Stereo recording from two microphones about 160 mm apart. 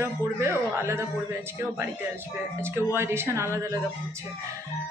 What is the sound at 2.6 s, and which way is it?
A woman's voice, 15° right (ahead or behind).